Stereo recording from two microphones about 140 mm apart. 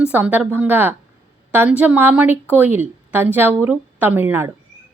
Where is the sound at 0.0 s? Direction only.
10° right (ahead or behind).